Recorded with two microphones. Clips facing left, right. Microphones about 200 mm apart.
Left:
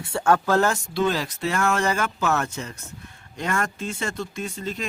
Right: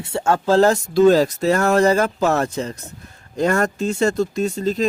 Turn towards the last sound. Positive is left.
turn(degrees=-40)  # may be behind; listen again after turning